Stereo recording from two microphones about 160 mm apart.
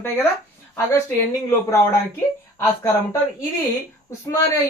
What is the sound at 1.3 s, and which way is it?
Speech, 20° left (ahead or behind).